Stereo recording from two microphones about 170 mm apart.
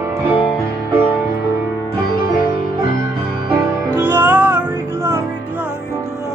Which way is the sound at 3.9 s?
10° right (ahead or behind).